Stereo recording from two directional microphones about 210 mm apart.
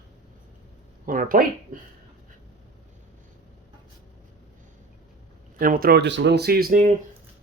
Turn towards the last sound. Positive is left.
turn(degrees=-40)  # may be behind; listen again after turning